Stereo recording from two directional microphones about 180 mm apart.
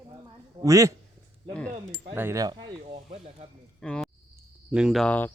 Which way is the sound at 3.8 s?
5° left (ahead or behind).